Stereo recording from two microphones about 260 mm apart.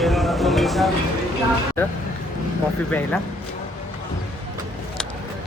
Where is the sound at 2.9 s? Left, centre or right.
Centre.